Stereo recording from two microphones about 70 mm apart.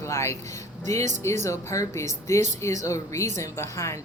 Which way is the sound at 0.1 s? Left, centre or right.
Left.